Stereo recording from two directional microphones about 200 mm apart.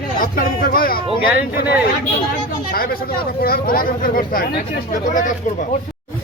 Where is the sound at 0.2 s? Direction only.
45° left (ahead or behind).